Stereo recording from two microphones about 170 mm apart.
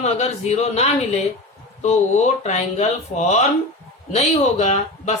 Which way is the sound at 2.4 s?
40° left (ahead or behind).